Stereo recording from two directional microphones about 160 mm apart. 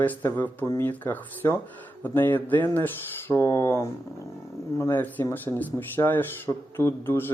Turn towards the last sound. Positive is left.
turn(degrees=15)  # may be behind; listen again after turning